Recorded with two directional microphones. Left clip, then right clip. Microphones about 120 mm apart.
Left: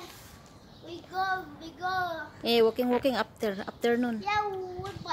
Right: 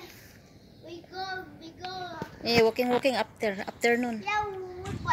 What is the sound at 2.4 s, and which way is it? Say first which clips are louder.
A woman's voice: right 1 dB; 10° left (ahead or behind).